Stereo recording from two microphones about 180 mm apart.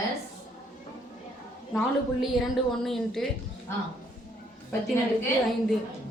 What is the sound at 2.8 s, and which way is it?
Speech, centre (ahead or behind).